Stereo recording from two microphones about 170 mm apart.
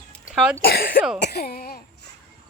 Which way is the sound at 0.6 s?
60° left (ahead or behind).